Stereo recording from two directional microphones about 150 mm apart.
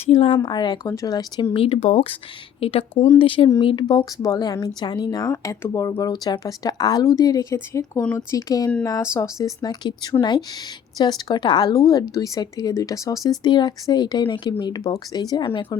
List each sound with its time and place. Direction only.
0.0 s speech: 45° left (ahead or behind)
0.4 s speech: 30° left (ahead or behind)
1.5 s speech: 40° left (ahead or behind)